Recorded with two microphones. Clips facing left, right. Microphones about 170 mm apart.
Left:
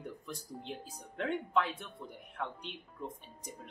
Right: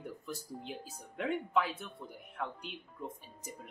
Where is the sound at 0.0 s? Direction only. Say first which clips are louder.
Right 1 dB; 5° right (ahead or behind).